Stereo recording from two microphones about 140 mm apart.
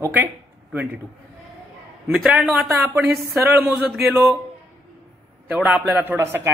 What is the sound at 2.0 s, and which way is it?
Speech, 5° right (ahead or behind).